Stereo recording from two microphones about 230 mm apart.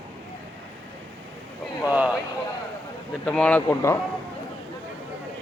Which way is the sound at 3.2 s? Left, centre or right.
Centre.